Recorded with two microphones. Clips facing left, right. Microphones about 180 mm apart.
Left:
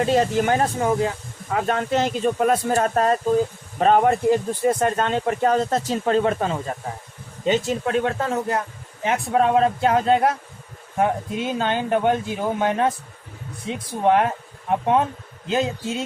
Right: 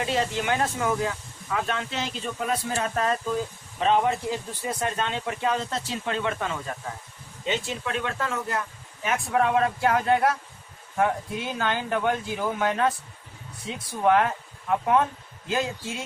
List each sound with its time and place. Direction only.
0.0 s speech: 45° left (ahead or behind)
1.5 s speech: 45° left (ahead or behind); by 16.0 s 20° left (ahead or behind)